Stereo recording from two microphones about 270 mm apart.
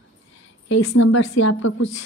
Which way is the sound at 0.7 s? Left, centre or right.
Left.